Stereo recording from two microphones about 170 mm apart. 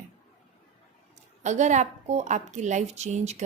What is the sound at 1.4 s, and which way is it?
A woman's voice, 45° right (ahead or behind).